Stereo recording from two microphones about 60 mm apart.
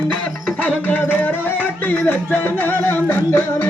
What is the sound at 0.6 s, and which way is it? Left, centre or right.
Music, left.